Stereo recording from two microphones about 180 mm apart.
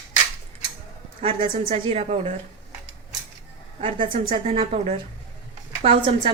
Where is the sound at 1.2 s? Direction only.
30° right (ahead or behind).